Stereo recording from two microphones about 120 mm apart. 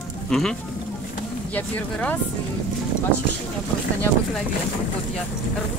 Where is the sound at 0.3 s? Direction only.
5° left (ahead or behind).